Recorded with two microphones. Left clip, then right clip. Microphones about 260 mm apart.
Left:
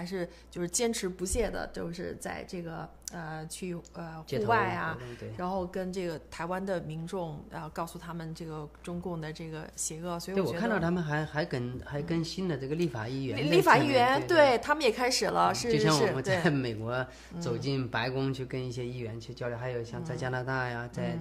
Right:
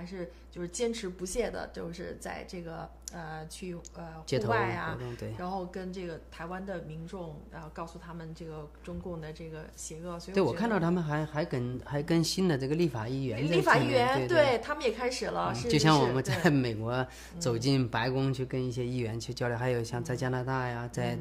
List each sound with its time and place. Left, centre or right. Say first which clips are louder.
0.0 s speech: left 5 dB; left
9.8 s speech: left 4 dB; left
10.3 s speech: right 3 dB; right
10.7 s speech: even; right
11.9 s speech: right 5 dB; right
13.4 s speech: left 3 dB; left
15.7 s speech: right 1 dB; right
18.9 s speech: right 4 dB; right
20.2 s speech: left 2 dB; centre